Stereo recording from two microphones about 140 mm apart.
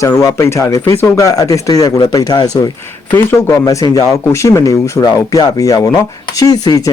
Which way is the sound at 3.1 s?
15° left (ahead or behind).